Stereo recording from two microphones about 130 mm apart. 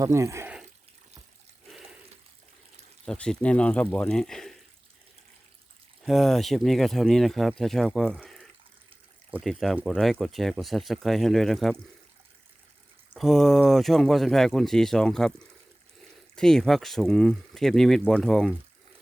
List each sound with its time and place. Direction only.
0.0 s speech: 25° right (ahead or behind)
1.6 s water: centre (ahead or behind)
3.1 s speech: 5° left (ahead or behind)
6.0 s speech: centre (ahead or behind)
13.1 s speech: centre (ahead or behind)
16.3 s speech: 5° left (ahead or behind)